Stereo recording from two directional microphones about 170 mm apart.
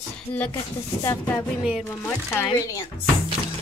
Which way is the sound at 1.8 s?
15° left (ahead or behind).